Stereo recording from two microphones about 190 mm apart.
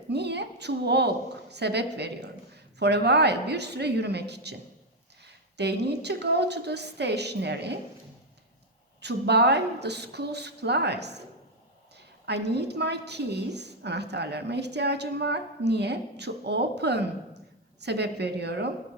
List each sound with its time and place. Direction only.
0.1 s a woman's voice: 60° right (ahead or behind)
5.5 s a woman's voice: 60° right (ahead or behind)
9.0 s a woman's voice: 60° right (ahead or behind)
12.2 s a woman's voice: 60° right (ahead or behind)